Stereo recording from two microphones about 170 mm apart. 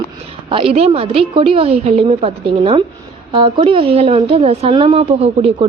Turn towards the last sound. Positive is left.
turn(degrees=-35)  # may be behind; listen again after turning